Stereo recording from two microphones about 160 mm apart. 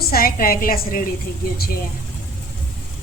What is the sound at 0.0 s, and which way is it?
A woman's voice, 70° left (ahead or behind).